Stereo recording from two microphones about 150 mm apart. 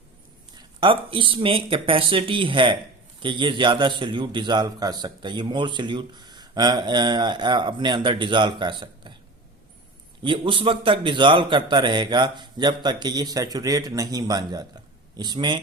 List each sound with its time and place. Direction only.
0.5 s a man's voice: 35° right (ahead or behind)
10.2 s a man's voice: 35° right (ahead or behind)